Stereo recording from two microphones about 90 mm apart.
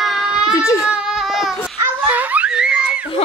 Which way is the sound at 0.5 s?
35° left (ahead or behind).